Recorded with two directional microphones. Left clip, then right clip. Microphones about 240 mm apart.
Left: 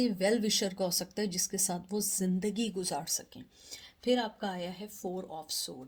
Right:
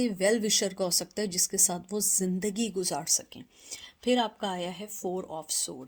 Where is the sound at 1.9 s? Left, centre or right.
Right.